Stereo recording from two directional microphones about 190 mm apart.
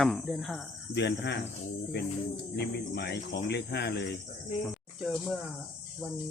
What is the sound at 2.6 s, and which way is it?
Speech, 60° left (ahead or behind).